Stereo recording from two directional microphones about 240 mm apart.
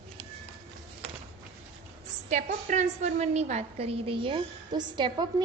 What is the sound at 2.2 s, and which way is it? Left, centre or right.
A woman's voice, right.